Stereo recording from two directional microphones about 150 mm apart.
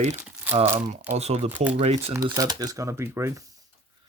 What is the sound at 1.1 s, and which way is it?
Speech, 45° right (ahead or behind).